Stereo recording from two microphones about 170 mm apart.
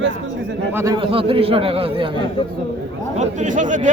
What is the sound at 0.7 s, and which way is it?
Speech, 15° right (ahead or behind).